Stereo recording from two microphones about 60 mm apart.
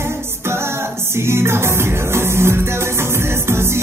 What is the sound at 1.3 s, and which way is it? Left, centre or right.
Music, right.